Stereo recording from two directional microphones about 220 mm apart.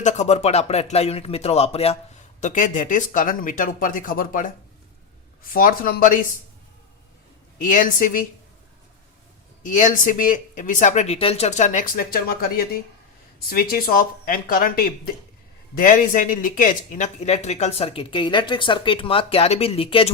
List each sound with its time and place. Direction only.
0.0 s speech: 30° left (ahead or behind)
7.6 s speech: 35° left (ahead or behind)
9.6 s speech: 35° left (ahead or behind)